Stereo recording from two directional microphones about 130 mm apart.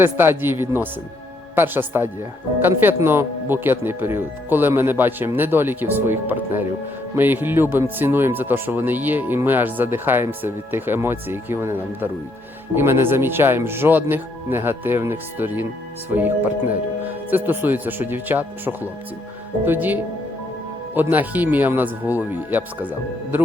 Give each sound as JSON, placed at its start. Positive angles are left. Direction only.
{"t": 0.0, "sound": "speech", "side_deg": -15}